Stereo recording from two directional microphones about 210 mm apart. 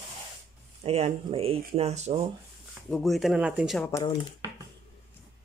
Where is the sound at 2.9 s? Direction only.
Centre (ahead or behind).